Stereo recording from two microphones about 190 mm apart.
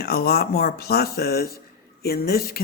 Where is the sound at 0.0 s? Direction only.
55° left (ahead or behind).